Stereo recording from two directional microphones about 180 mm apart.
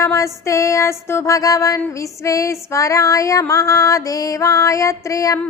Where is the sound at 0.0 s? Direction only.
15° left (ahead or behind).